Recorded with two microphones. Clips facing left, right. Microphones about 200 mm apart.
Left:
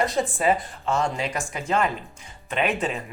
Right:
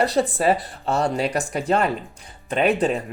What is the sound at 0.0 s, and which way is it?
Speech, 35° right (ahead or behind).